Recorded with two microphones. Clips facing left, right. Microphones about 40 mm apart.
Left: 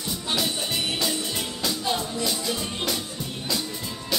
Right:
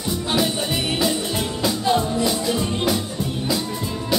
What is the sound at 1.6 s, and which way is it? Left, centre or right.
Music, centre.